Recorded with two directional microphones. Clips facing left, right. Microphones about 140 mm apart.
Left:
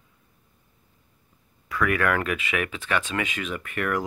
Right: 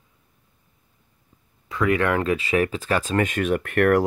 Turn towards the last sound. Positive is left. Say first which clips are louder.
# right 9 dB
turn(degrees=-60)  # may be behind; listen again after turning